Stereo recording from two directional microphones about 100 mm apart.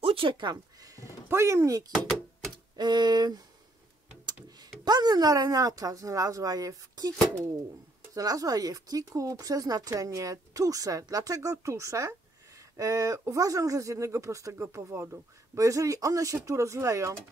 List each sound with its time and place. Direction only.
0.0 s speech: 65° right (ahead or behind)
0.7 s speech: 35° right (ahead or behind)
2.5 s speech: 45° right (ahead or behind)
4.8 s speech: 45° right (ahead or behind)